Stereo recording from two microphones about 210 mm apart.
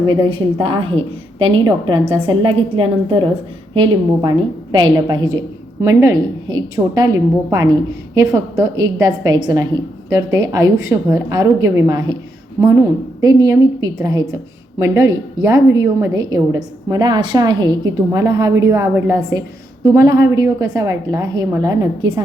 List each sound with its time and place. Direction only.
0.0 s a woman's voice: 20° right (ahead or behind)
13.2 s a woman's voice: 15° right (ahead or behind)